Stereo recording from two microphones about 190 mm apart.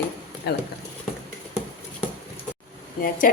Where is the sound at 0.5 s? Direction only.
60° left (ahead or behind).